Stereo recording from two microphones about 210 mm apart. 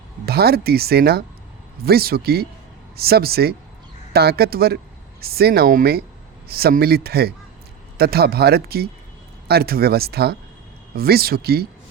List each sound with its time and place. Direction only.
0.3 s speech: 50° right (ahead or behind)